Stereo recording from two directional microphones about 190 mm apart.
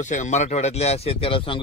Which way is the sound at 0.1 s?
40° left (ahead or behind).